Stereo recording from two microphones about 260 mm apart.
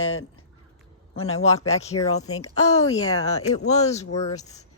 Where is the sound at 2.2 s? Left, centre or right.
Left.